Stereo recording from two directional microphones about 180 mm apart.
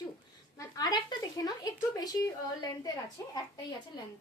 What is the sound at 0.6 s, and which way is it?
Speech, 20° left (ahead or behind).